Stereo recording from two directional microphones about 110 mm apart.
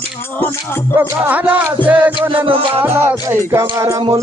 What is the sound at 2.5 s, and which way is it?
Music, 55° right (ahead or behind).